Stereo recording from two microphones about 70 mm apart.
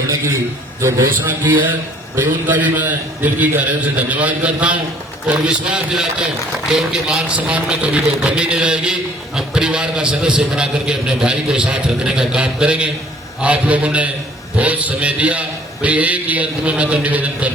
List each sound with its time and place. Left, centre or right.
0.8 s a man's voice: right
1.5 s a man's voice: right